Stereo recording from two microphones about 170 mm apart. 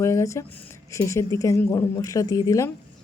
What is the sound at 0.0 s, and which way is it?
Speech, 20° left (ahead or behind).